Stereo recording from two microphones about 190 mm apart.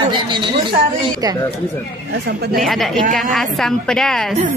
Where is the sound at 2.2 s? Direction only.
55° right (ahead or behind).